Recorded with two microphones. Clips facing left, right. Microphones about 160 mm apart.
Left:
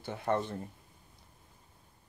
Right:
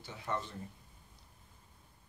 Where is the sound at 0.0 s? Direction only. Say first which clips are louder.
Left 7 dB; 55° left (ahead or behind).